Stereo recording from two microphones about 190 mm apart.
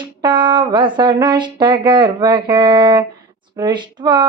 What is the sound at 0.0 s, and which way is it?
Speech, 25° right (ahead or behind).